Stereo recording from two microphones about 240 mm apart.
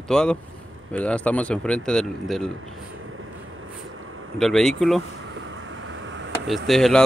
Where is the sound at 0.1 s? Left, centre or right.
Centre.